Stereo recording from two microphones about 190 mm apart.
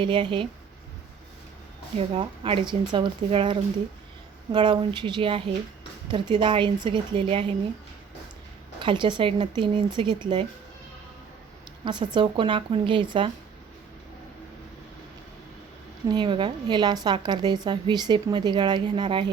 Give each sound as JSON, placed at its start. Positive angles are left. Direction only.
{"t": 0.0, "sound": "a woman's voice", "side_deg": -25}
{"t": 2.0, "sound": "a woman's voice", "side_deg": -30}
{"t": 8.8, "sound": "a woman's voice", "side_deg": -25}
{"t": 11.9, "sound": "a woman's voice", "side_deg": -25}
{"t": 16.0, "sound": "a woman's voice", "side_deg": -25}